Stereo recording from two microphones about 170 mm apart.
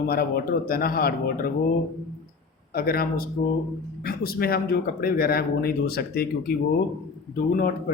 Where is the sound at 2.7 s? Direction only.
60° left (ahead or behind).